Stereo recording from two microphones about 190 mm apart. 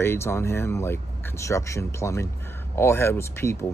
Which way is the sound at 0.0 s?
15° left (ahead or behind).